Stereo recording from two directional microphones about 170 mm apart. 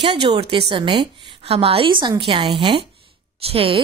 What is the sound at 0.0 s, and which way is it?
A woman's voice, 30° right (ahead or behind).